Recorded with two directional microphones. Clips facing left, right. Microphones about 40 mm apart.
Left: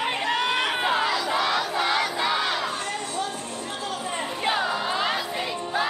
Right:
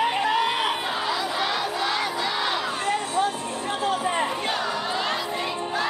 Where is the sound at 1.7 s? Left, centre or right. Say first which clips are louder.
Left 2 dB; centre.